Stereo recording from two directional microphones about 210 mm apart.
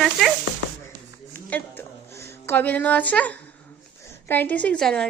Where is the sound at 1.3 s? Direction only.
10° left (ahead or behind).